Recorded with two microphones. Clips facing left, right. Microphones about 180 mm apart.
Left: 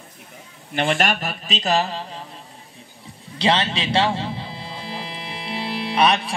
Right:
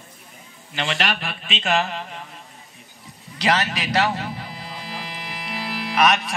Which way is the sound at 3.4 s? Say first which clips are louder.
Left 2 dB; 25° left (ahead or behind).